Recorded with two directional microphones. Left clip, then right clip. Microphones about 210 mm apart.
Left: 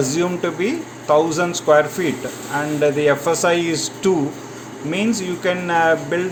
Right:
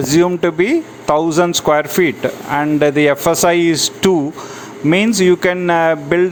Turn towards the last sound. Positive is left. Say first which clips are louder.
# right 4 dB
turn(degrees=-50)  # may be behind; listen again after turning